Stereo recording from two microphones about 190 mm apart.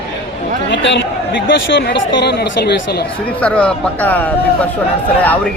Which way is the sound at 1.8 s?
60° left (ahead or behind).